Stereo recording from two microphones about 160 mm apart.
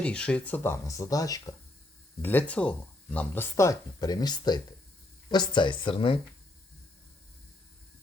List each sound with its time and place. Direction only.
0.0 s speech: 5° left (ahead or behind)
2.2 s speech: 10° left (ahead or behind); by 6.1 s 35° left (ahead or behind)